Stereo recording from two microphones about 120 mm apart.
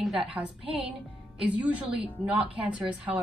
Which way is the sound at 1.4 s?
10° right (ahead or behind).